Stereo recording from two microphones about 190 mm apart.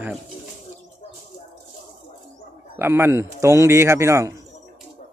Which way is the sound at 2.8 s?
10° right (ahead or behind).